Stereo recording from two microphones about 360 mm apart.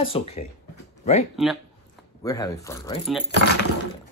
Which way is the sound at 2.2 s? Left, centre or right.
Centre.